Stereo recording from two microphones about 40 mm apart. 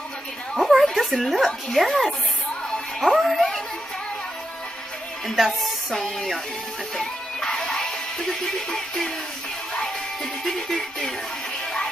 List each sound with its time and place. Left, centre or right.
0.6 s a sound: centre
0.9 s a woman's voice: centre
3.0 s speech: centre
5.2 s speech: centre
7.0 s music: centre
10.4 s music: centre